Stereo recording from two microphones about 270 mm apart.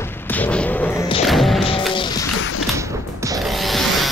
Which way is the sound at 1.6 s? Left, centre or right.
Centre.